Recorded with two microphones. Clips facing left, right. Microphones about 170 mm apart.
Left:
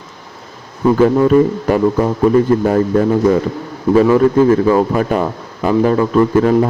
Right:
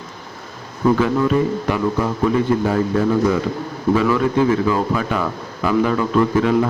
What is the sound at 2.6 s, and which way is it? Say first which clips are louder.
A man's voice: left 5 dB; 40° left (ahead or behind).